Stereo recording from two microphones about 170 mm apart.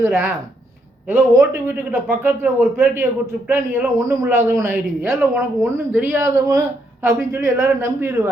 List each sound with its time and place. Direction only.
0.0 s a man's voice: 10° right (ahead or behind)